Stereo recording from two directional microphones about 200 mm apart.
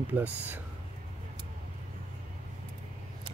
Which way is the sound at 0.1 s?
10° right (ahead or behind).